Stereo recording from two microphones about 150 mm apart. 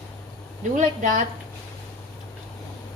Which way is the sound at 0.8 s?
60° right (ahead or behind).